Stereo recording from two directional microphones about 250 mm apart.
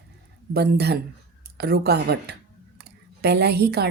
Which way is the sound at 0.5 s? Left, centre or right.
Right.